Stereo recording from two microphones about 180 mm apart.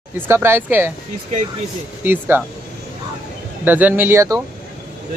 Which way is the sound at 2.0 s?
10° right (ahead or behind).